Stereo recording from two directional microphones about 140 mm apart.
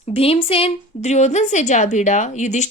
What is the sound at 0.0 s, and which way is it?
A woman's voice, 45° left (ahead or behind).